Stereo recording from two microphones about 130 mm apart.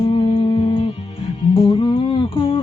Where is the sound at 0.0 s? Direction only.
45° left (ahead or behind).